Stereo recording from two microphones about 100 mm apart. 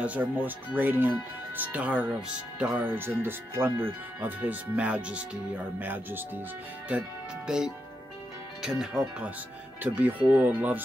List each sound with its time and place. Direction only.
0.0 s speech: 15° right (ahead or behind)